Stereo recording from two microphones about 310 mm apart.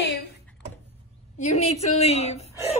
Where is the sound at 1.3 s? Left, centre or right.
Left.